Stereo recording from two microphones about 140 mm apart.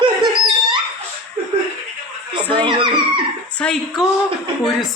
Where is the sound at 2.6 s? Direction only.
35° right (ahead or behind).